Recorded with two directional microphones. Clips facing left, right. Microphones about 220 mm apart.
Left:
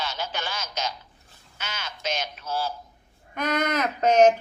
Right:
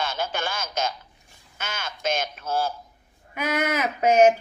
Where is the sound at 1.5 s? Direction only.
50° right (ahead or behind).